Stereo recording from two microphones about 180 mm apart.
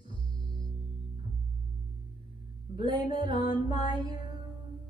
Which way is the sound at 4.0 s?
25° right (ahead or behind).